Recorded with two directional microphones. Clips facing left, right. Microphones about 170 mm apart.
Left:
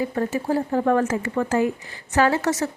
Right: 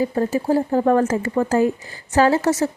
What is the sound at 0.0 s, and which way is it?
A woman's voice, 30° right (ahead or behind).